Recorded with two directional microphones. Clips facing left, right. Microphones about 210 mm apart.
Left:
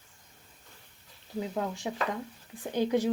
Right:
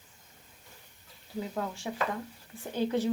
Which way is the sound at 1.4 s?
15° left (ahead or behind).